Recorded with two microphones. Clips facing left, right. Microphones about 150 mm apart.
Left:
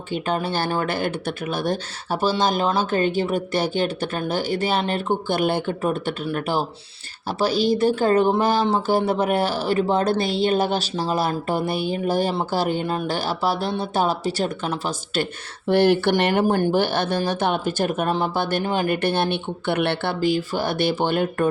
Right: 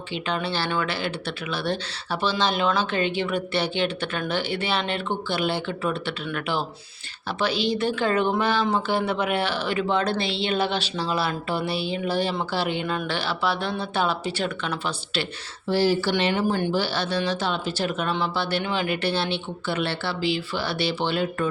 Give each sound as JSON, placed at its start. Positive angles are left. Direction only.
{"t": 0.1, "sound": "speech", "side_deg": 45}